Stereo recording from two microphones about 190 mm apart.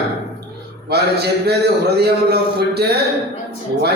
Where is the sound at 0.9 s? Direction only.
60° right (ahead or behind).